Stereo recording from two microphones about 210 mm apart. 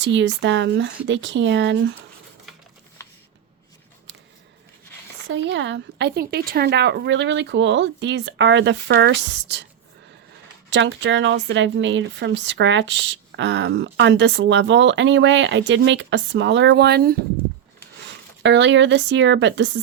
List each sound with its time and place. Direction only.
0.0 s a woman's voice: 60° right (ahead or behind)
3.0 s shuffling cards: 15° left (ahead or behind)
5.3 s a woman's voice: 60° right (ahead or behind)
10.7 s a woman's voice: 60° right (ahead or behind)
18.4 s a woman's voice: 60° right (ahead or behind)